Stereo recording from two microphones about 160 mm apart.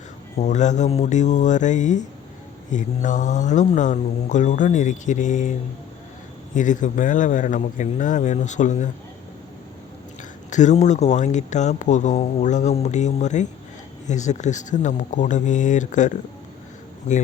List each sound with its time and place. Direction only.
0.3 s speech: 45° left (ahead or behind)
10.5 s speech: 50° left (ahead or behind)